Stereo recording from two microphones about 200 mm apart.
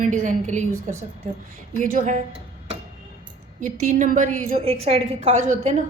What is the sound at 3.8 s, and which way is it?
A woman's voice, 40° right (ahead or behind).